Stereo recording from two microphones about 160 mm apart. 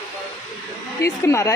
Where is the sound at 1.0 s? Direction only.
20° left (ahead or behind).